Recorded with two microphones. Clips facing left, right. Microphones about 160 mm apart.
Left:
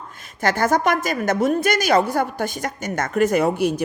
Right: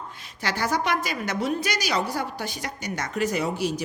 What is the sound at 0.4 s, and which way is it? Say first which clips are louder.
A woman's voice: left 7 dB; 50° left (ahead or behind).